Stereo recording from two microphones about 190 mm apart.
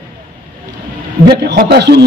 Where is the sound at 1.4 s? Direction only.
60° right (ahead or behind).